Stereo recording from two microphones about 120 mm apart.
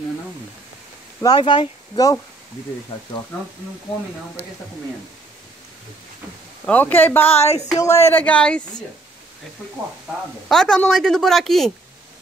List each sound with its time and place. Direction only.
1.2 s speech: 35° left (ahead or behind)
3.3 s speech: 10° left (ahead or behind)
6.6 s speech: 15° left (ahead or behind)
7.3 s speech: 60° left (ahead or behind)
7.8 s speech: 20° left (ahead or behind)
10.5 s a woman's voice: 5° left (ahead or behind)